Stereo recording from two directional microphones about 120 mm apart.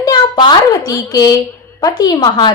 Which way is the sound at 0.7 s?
25° left (ahead or behind).